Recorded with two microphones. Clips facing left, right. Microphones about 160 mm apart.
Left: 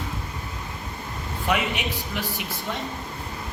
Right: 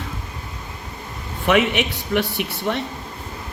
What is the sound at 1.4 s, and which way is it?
A man's voice, 70° right (ahead or behind).